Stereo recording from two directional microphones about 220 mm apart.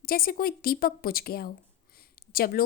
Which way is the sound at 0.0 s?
40° left (ahead or behind).